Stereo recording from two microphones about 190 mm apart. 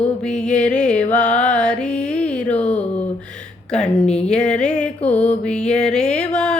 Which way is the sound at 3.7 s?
35° left (ahead or behind).